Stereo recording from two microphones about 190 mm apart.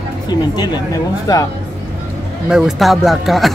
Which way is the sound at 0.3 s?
20° left (ahead or behind).